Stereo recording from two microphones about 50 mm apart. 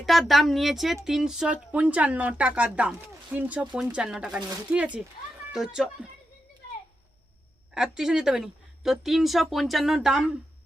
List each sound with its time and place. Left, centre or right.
0.0 s speech: centre
1.5 s a woman's voice: right
3.8 s a woman's voice: centre
7.7 s speech: centre
10.1 s speech: centre